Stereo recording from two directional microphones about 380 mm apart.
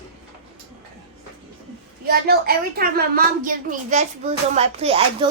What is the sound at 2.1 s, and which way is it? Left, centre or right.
A woman's voice, right.